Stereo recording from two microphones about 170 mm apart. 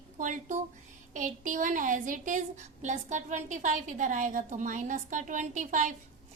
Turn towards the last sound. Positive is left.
turn(degrees=-50)  # may be behind; listen again after turning